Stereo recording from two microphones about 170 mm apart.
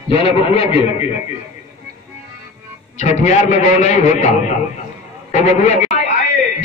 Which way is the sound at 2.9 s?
45° left (ahead or behind).